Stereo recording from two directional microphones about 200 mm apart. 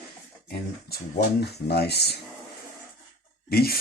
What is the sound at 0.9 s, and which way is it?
Speech, 50° left (ahead or behind).